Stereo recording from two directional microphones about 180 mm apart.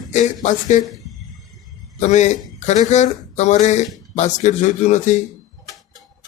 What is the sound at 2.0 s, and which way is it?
Speech, 40° left (ahead or behind).